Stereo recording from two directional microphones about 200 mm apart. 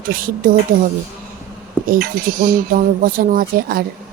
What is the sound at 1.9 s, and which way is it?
Speech, 45° right (ahead or behind).